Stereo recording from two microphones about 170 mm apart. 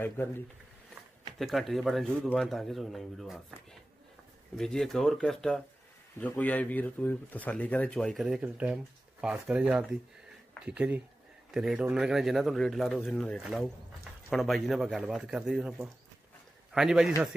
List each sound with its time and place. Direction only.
0.2 s speech: 10° left (ahead or behind)
1.4 s a man's voice: centre (ahead or behind)
4.6 s a man's voice: 5° left (ahead or behind)